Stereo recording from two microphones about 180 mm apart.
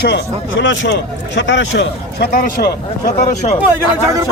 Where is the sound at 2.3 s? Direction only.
50° left (ahead or behind).